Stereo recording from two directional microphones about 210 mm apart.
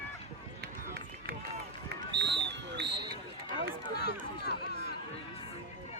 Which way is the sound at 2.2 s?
55° right (ahead or behind).